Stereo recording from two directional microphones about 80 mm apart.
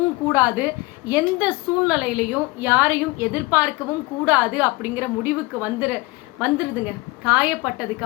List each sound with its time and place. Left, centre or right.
0.3 s a woman's voice: centre